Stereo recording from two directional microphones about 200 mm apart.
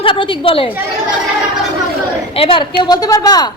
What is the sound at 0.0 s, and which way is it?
Speech, 25° left (ahead or behind).